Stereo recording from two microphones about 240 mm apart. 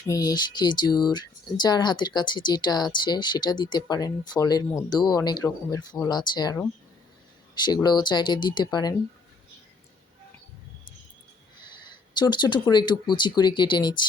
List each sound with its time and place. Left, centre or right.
0.0 s speech: centre
11.8 s speech: centre